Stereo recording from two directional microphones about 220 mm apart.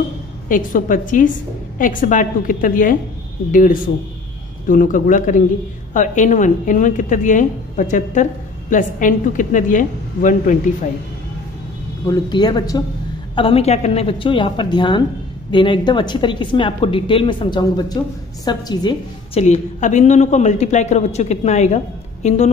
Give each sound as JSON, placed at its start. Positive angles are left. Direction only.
{"t": 0.5, "sound": "a woman's voice", "side_deg": 35}
{"t": 12.1, "sound": "a woman's voice", "side_deg": 20}
{"t": 19.4, "sound": "a woman's voice", "side_deg": 30}